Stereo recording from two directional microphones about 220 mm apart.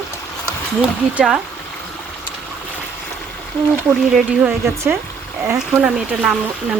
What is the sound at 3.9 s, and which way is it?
Speech, centre (ahead or behind).